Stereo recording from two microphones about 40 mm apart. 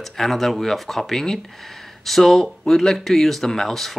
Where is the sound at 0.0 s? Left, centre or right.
Centre.